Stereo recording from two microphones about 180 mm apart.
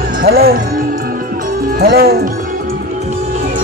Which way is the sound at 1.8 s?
60° right (ahead or behind).